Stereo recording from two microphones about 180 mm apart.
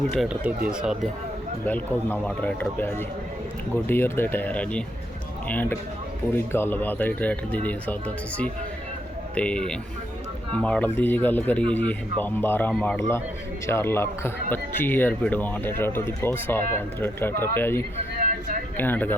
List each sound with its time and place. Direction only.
0.1 s speech: centre (ahead or behind)
1.6 s a man's voice: 10° left (ahead or behind)
18.2 s a sound: 50° right (ahead or behind)
18.8 s a man's voice: 10° left (ahead or behind)